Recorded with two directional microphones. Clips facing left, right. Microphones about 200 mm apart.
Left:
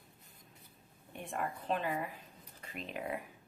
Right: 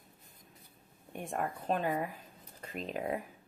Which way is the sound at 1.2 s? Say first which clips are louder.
Right 3 dB; 45° right (ahead or behind).